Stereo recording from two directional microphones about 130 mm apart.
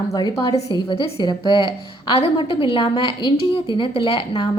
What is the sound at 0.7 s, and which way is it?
Speech, 45° left (ahead or behind).